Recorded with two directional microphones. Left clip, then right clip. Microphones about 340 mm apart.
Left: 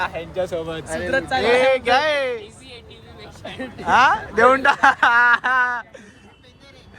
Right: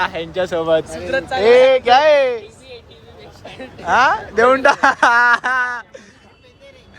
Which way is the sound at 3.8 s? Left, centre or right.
Centre.